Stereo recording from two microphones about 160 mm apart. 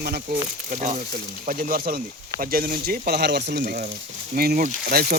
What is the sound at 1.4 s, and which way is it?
Speech, 65° right (ahead or behind).